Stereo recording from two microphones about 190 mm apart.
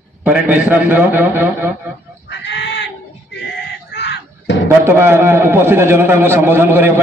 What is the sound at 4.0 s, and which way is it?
Music, 65° left (ahead or behind).